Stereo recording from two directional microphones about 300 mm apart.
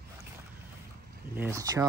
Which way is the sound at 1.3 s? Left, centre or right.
Centre.